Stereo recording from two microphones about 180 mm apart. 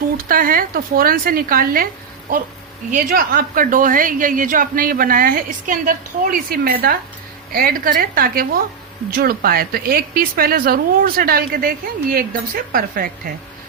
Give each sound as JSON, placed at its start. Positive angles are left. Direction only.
{"t": 0.2, "sound": "a woman's voice", "side_deg": -50}
{"t": 2.9, "sound": "a woman's voice", "side_deg": -50}